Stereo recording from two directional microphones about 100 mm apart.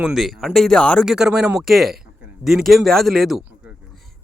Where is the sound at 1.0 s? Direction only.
5° right (ahead or behind).